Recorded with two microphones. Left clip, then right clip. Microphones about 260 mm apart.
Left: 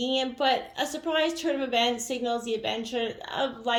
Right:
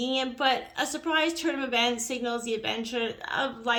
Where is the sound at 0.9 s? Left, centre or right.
Right.